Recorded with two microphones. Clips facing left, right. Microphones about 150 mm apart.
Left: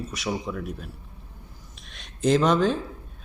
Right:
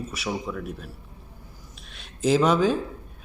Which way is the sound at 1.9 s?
5° right (ahead or behind).